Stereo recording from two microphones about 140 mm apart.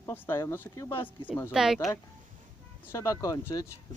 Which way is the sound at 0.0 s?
15° left (ahead or behind).